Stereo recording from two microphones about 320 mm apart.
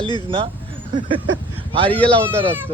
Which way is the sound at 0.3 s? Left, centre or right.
Centre.